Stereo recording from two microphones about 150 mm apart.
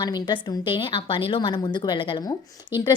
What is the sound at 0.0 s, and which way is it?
A woman's voice, 30° left (ahead or behind).